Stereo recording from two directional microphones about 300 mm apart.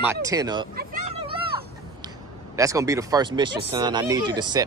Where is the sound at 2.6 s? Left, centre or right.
Centre.